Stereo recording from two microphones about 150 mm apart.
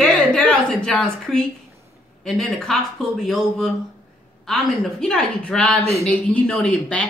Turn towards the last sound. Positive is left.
turn(degrees=10)  # may be behind; listen again after turning